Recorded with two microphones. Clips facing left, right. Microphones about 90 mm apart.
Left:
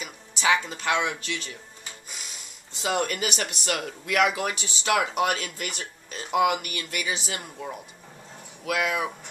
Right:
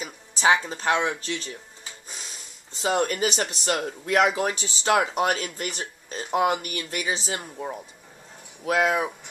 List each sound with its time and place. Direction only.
0.0 s speech: 35° right (ahead or behind)